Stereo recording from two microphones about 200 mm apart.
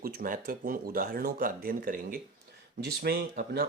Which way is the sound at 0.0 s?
45° right (ahead or behind).